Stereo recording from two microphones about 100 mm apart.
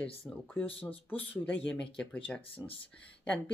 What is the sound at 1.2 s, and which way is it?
Speech, 15° left (ahead or behind).